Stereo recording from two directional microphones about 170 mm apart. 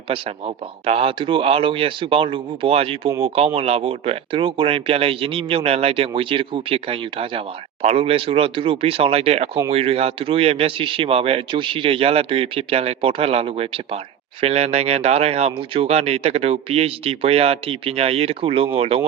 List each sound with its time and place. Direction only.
0.1 s speech: 35° right (ahead or behind)